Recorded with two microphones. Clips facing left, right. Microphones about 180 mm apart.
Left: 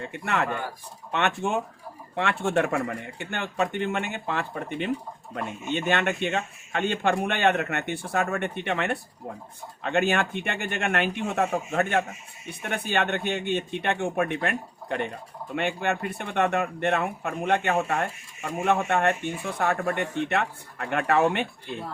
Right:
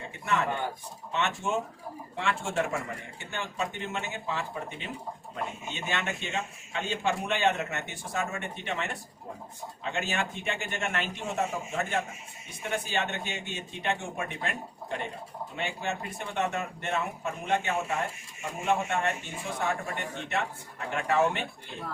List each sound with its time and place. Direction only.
0.1 s speech: 60° left (ahead or behind)